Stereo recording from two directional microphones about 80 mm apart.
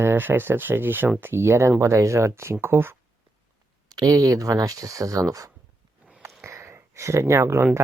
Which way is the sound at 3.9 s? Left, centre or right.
Right.